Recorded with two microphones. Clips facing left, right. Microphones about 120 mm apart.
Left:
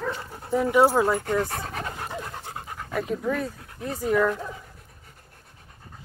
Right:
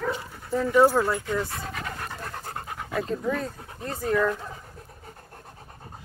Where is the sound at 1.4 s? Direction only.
55° left (ahead or behind).